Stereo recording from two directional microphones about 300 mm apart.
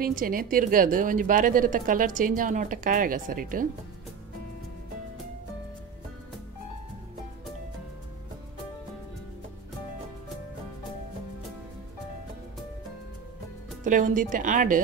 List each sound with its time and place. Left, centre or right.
0.0 s a woman's voice: right
13.8 s a woman's voice: right